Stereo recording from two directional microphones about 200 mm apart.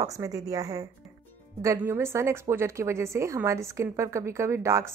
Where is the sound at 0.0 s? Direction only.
15° right (ahead or behind).